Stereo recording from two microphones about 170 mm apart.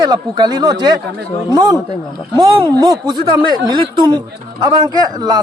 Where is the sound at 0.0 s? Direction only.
25° right (ahead or behind).